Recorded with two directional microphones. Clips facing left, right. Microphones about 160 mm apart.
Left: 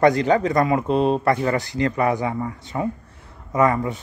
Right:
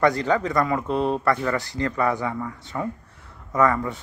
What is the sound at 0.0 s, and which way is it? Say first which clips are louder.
Speech: left 4 dB; 20° left (ahead or behind).